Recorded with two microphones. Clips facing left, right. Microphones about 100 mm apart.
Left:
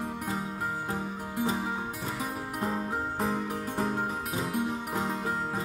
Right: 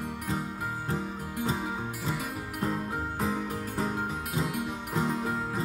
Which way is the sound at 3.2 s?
Centre (ahead or behind).